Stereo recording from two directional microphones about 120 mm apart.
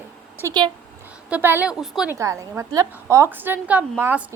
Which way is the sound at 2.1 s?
25° right (ahead or behind).